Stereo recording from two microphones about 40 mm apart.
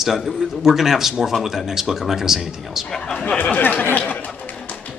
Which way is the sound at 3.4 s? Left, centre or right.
Left.